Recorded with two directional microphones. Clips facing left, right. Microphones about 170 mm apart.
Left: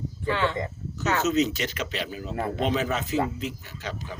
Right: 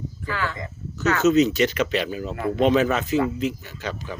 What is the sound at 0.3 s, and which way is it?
Speech, 25° left (ahead or behind).